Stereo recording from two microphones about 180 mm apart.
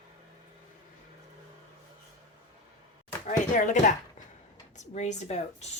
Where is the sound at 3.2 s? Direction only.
45° left (ahead or behind).